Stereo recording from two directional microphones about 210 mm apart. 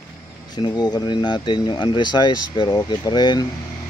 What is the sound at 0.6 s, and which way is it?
Speech, 20° left (ahead or behind).